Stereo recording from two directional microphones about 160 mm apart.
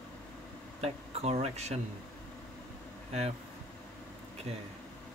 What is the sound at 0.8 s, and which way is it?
Speech, 40° right (ahead or behind).